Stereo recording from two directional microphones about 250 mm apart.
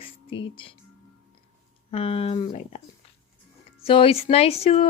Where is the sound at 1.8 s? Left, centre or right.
Left.